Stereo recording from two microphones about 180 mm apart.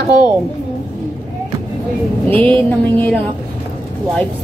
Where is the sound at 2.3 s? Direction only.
10° left (ahead or behind).